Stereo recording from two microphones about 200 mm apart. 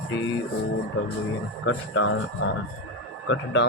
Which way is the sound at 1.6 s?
75° left (ahead or behind).